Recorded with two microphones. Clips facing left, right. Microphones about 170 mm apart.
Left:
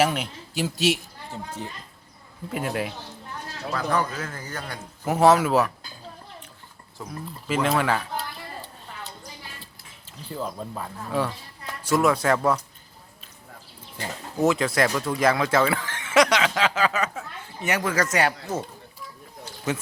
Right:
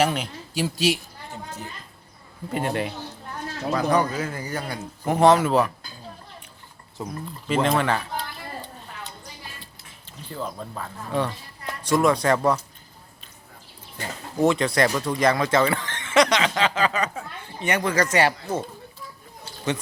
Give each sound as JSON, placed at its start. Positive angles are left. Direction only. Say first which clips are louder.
{"t": 0.0, "sound": "speech", "louder": "even", "side_deg": 0}
{"t": 2.5, "sound": "speech", "louder": "right 2 dB", "side_deg": 5}
{"t": 3.7, "sound": "speech", "louder": "right 4 dB", "side_deg": -15}
{"t": 5.0, "sound": "speech", "louder": "right 1 dB", "side_deg": 5}
{"t": 7.0, "sound": "speech", "louder": "right 5 dB", "side_deg": -20}
{"t": 7.4, "sound": "speech", "louder": "right 1 dB", "side_deg": 5}
{"t": 10.3, "sound": "speech", "louder": "left 1 dB", "side_deg": 5}
{"t": 14.4, "sound": "speech", "louder": "right 1 dB", "side_deg": 5}